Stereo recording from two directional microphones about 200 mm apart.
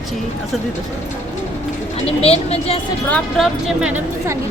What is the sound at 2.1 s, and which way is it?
Speech, 30° left (ahead or behind).